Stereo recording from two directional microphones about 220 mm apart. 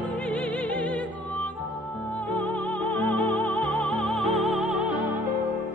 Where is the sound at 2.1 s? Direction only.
5° left (ahead or behind).